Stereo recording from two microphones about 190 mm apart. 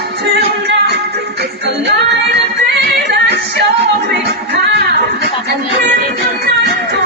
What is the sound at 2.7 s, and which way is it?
Music, 60° right (ahead or behind).